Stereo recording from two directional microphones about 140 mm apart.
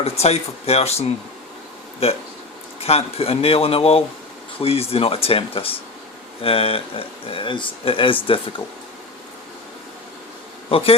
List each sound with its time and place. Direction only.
0.0 s speech: 50° left (ahead or behind)
10.7 s speech: 40° left (ahead or behind)